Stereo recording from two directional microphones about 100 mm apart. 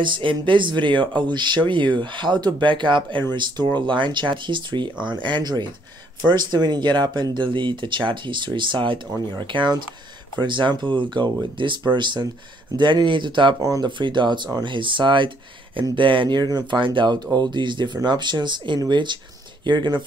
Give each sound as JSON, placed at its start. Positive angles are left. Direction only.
{"t": 0.0, "sound": "speech", "side_deg": -55}
{"t": 13.6, "sound": "speech", "side_deg": -35}
{"t": 13.8, "sound": "speech", "side_deg": -50}